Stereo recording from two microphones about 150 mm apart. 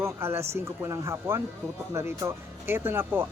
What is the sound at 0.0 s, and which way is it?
Speech, 15° right (ahead or behind).